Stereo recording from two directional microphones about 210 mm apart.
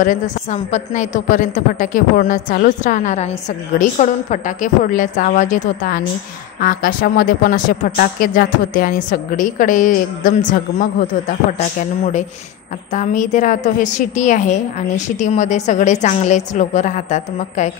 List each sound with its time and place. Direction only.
0.0 s a woman's voice: 35° left (ahead or behind)
12.9 s a woman's voice: 35° left (ahead or behind)